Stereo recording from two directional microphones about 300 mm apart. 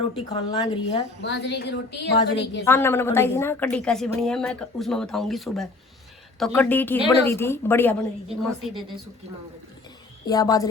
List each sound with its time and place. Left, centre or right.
0.3 s speech: centre
1.2 s a woman's voice: left
2.6 s a woman's voice: centre
10.2 s speech: centre